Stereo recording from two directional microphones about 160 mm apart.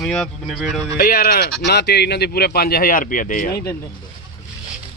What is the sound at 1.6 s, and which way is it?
Speech, 90° left.